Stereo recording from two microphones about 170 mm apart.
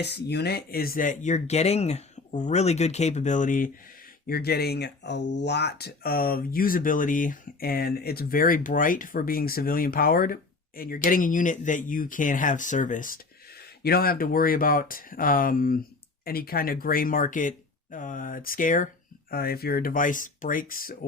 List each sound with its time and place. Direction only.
0.0 s speech: 75° left (ahead or behind); by 3.7 s 50° left (ahead or behind)
4.3 s speech: 65° left (ahead or behind); by 13.1 s 50° left (ahead or behind)
13.6 s speech: 65° left (ahead or behind); by 18.9 s 50° left (ahead or behind)
19.3 s speech: 60° left (ahead or behind)